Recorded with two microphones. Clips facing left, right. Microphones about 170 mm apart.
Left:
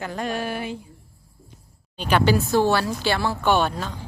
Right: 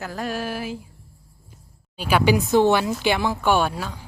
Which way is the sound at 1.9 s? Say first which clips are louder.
Right 1 dB; 5° right (ahead or behind).